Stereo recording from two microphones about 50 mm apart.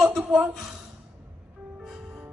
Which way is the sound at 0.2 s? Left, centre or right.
Right.